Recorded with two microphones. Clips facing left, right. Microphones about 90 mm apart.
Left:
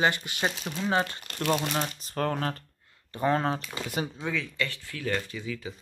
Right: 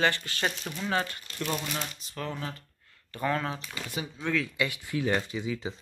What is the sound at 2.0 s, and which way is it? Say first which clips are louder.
Speech: left 7 dB; 50° left (ahead or behind).